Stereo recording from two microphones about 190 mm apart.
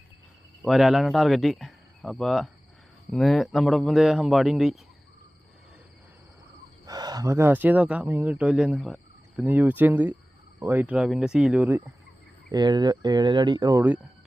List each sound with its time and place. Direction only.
0.6 s speech: centre (ahead or behind)
6.8 s speech: 20° right (ahead or behind)
12.5 s speech: 20° right (ahead or behind)